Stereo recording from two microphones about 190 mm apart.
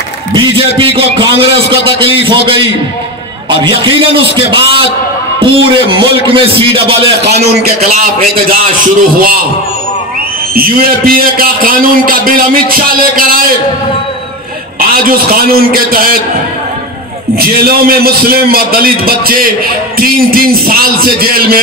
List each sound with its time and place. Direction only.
0.3 s a man's voice: 25° right (ahead or behind)
8.0 s a man's voice: 45° right (ahead or behind)
10.5 s a man's voice: 50° right (ahead or behind)
14.8 s a man's voice: 50° right (ahead or behind)
17.4 s a man's voice: 55° right (ahead or behind)